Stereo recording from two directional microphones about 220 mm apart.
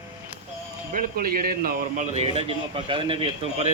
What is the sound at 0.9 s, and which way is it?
Speech, 40° right (ahead or behind).